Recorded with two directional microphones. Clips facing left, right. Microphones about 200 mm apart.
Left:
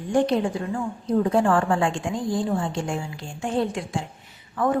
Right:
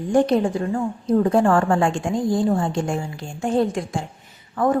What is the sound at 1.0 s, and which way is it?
A woman's voice, 45° right (ahead or behind).